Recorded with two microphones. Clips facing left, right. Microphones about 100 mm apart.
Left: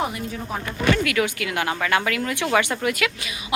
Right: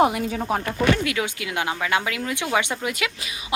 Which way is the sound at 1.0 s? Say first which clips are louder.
Left 3 dB; 20° right (ahead or behind).